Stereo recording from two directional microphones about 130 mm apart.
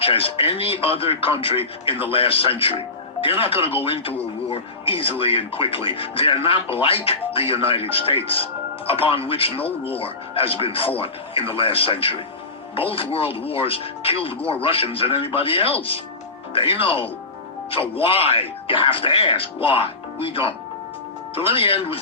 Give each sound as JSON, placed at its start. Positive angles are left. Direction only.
{"t": 0.0, "sound": "speech", "side_deg": 45}